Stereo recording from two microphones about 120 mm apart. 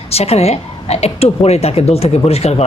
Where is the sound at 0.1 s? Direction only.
60° left (ahead or behind).